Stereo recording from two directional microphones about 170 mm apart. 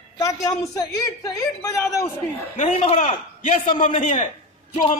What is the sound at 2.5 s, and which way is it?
A man's voice, 45° left (ahead or behind).